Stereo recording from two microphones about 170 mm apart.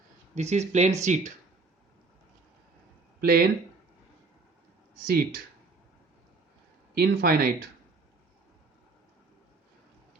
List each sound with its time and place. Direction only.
0.3 s speech: 40° right (ahead or behind)
3.2 s speech: 60° right (ahead or behind)
5.0 s speech: 60° right (ahead or behind)
6.9 s speech: 65° right (ahead or behind)